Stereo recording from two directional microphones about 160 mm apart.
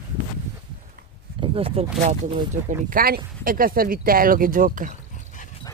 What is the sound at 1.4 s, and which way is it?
Speech, 35° right (ahead or behind).